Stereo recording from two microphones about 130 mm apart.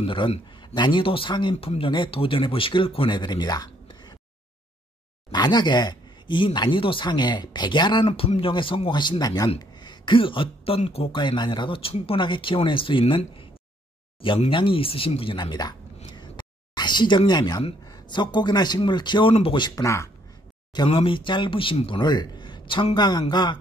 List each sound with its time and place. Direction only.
0.0 s speech: 40° left (ahead or behind)
5.3 s speech: 35° left (ahead or behind)
8.1 s speech: 50° left (ahead or behind)
11.1 s speech: 35° left (ahead or behind)
14.5 s speech: 40° left (ahead or behind)
16.1 s a sound: 35° left (ahead or behind)
17.3 s speech: 35° left (ahead or behind)
19.7 s speech: 25° left (ahead or behind)
20.7 s speech: 40° left (ahead or behind)